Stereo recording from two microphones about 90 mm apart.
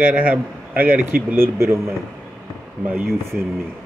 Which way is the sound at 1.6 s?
30° right (ahead or behind).